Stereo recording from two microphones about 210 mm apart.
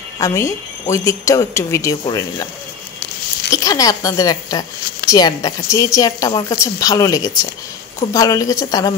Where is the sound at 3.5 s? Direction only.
15° left (ahead or behind).